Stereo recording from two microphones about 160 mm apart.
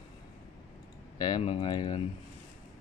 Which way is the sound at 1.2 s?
25° left (ahead or behind).